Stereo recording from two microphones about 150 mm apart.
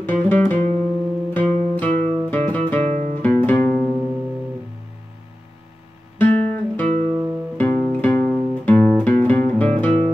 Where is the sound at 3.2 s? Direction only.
10° left (ahead or behind).